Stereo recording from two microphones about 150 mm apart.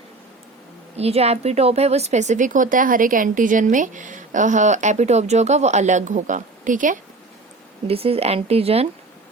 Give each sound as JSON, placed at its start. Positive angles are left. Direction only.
{"t": 0.9, "sound": "speech", "side_deg": -45}
{"t": 7.9, "sound": "speech", "side_deg": -40}